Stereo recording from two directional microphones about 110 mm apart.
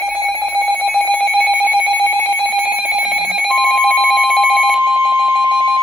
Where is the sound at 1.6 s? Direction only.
10° right (ahead or behind).